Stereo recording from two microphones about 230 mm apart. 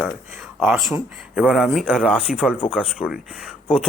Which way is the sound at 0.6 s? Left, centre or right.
Centre.